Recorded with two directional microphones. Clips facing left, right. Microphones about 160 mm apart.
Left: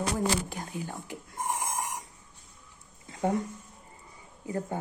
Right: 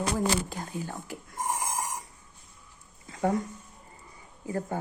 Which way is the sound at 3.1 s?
20° left (ahead or behind).